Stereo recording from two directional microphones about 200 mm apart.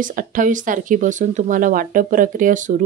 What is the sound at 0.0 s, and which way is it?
Speech, 45° right (ahead or behind).